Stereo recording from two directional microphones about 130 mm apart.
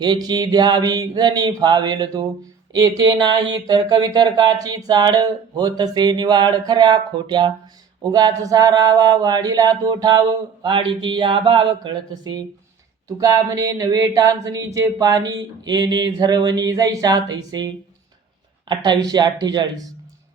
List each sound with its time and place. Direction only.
0.0 s speech: 35° right (ahead or behind)
13.1 s a sound: 25° right (ahead or behind)
18.7 s speech: 35° right (ahead or behind)